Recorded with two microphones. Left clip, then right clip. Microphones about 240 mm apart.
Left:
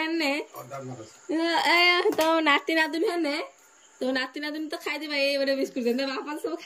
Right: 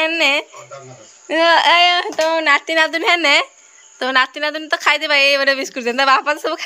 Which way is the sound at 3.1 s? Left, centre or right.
Right.